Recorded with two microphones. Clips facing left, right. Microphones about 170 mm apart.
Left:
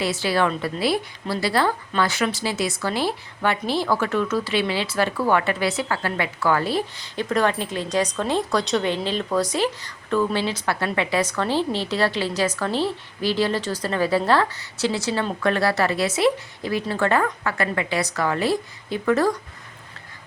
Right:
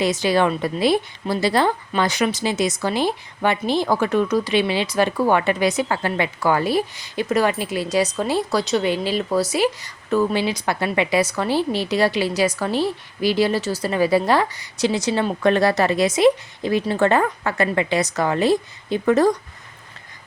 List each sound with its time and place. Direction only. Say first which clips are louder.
0.0 s a woman's voice: right 3 dB; 20° right (ahead or behind)